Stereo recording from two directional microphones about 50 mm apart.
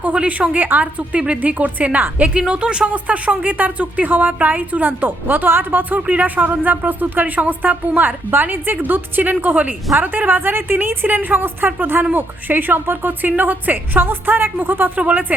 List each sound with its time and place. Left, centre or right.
0.0 s a woman's voice: right
2.9 s speech: right
6.0 s a woman's voice: right